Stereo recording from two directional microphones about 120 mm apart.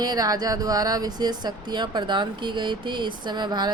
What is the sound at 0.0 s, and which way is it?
Speech, 35° right (ahead or behind).